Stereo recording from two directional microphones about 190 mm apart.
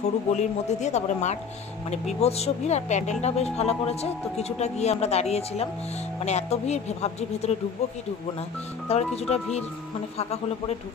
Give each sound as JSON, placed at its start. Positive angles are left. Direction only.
{"t": 0.0, "sound": "speech", "side_deg": 35}
{"t": 8.8, "sound": "speech", "side_deg": 35}